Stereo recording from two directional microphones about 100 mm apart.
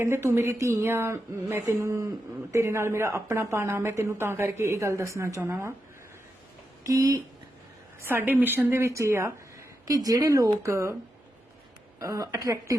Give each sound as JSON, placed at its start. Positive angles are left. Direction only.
{"t": 0.0, "sound": "a woman's voice", "side_deg": -25}
{"t": 6.8, "sound": "speech", "side_deg": -35}
{"t": 8.0, "sound": "a woman's voice", "side_deg": -20}
{"t": 11.9, "sound": "speech", "side_deg": -35}